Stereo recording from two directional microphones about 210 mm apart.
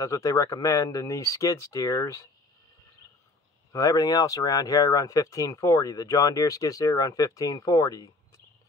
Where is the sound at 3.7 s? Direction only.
15° left (ahead or behind).